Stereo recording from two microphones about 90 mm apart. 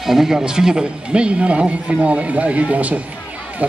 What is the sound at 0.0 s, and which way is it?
Speech, 5° right (ahead or behind).